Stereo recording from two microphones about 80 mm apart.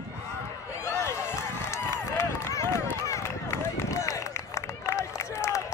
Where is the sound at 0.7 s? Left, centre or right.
Left.